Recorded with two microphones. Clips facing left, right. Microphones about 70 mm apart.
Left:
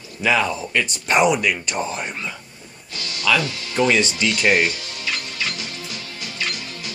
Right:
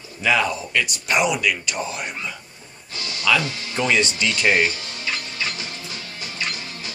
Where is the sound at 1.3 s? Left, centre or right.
Centre.